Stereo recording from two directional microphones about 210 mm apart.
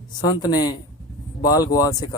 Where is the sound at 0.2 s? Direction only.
20° left (ahead or behind).